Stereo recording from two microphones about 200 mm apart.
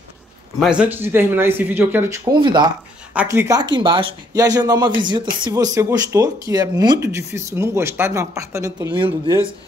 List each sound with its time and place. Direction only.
0.6 s speech: 5° right (ahead or behind)